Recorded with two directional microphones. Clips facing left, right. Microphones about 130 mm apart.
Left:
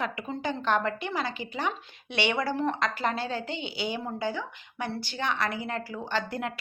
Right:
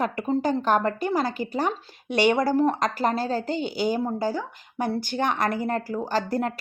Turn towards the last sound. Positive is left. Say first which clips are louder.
# right 6 dB
turn(degrees=-40)  # may be behind; listen again after turning